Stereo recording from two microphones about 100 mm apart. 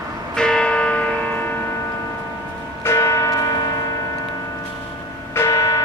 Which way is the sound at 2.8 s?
30° left (ahead or behind).